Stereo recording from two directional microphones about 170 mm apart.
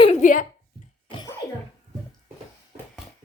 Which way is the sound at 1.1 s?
25° left (ahead or behind).